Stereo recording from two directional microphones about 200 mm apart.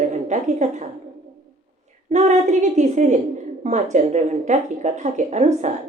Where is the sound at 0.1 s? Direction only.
35° right (ahead or behind).